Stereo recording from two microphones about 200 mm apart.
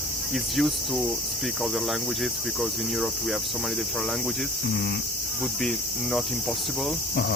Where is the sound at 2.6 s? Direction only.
Centre (ahead or behind).